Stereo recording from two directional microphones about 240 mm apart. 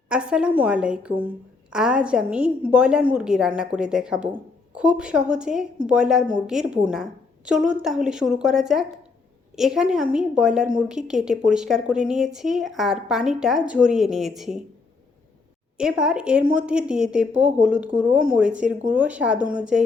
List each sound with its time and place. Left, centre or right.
0.1 s a woman's voice: centre
15.8 s a woman's voice: centre